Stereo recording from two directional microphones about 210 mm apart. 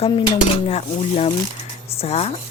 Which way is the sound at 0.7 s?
30° left (ahead or behind).